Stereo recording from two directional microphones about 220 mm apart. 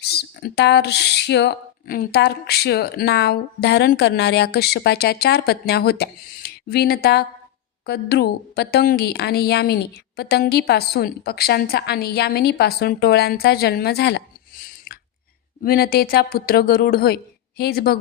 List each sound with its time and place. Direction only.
0.0 s speech: 45° left (ahead or behind)